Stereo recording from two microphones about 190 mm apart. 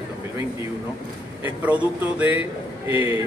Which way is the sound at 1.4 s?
10° right (ahead or behind).